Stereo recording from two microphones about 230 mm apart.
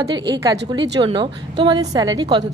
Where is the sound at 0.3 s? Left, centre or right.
Centre.